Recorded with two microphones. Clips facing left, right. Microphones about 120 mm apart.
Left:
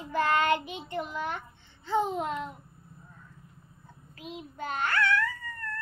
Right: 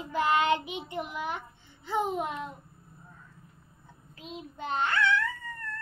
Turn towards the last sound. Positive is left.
turn(degrees=-20)  # may be behind; listen again after turning